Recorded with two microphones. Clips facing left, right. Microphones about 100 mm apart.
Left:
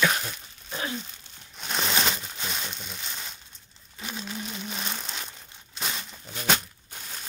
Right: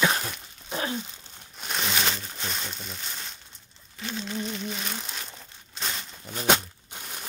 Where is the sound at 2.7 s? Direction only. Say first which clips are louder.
Even; centre (ahead or behind).